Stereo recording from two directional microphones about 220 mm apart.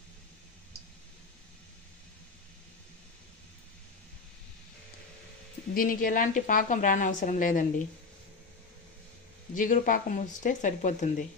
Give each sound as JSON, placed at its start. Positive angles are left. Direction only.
{"t": 5.8, "sound": "a woman's voice", "side_deg": 40}
{"t": 9.5, "sound": "a woman's voice", "side_deg": 35}